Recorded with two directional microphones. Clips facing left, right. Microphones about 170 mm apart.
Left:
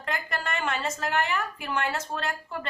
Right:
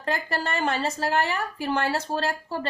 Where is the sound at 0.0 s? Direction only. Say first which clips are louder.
Right 4 dB; 35° right (ahead or behind).